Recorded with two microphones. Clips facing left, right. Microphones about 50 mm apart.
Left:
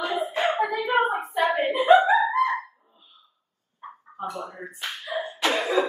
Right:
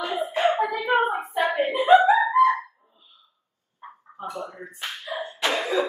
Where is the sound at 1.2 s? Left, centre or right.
Centre.